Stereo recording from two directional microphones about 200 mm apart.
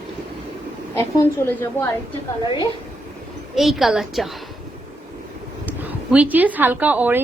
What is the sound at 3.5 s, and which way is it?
Speech, centre (ahead or behind).